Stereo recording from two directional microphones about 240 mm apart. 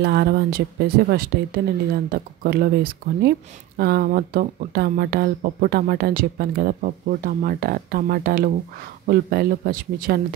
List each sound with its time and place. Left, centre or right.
0.0 s speech: right